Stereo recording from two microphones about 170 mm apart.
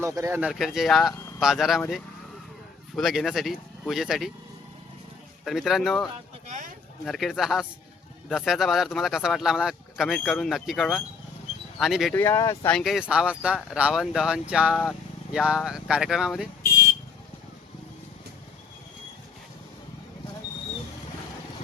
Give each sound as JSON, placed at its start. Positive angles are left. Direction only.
{"t": 0.0, "sound": "speech", "side_deg": -20}
{"t": 2.9, "sound": "speech", "side_deg": 0}
{"t": 5.5, "sound": "speech", "side_deg": 0}
{"t": 12.1, "sound": "speech", "side_deg": 15}
{"t": 12.7, "sound": "speech", "side_deg": 0}